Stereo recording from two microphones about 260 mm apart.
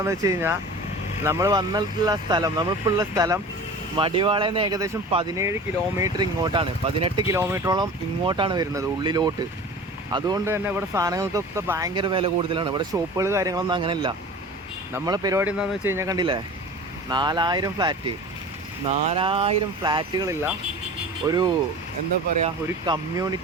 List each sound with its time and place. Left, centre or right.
0.0 s speech: centre
22.9 s speech: centre